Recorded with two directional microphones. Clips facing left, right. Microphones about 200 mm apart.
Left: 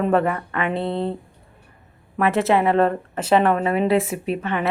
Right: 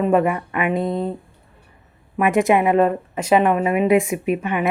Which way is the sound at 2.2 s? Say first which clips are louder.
Right 2 dB; 15° right (ahead or behind).